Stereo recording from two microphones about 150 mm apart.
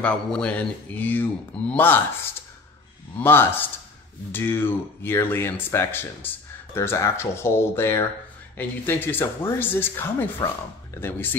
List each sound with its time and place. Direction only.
0.0 s speech: 5° left (ahead or behind)
3.2 s speech: 15° left (ahead or behind)